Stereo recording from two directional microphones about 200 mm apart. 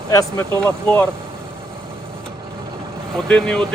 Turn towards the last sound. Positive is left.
turn(degrees=5)  # may be behind; listen again after turning